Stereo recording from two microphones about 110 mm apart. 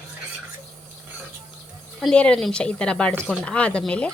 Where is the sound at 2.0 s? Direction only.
5° left (ahead or behind).